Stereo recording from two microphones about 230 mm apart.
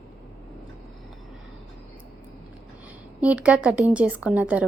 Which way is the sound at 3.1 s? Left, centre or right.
Centre.